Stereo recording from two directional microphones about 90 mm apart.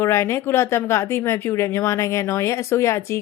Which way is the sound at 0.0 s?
30° left (ahead or behind).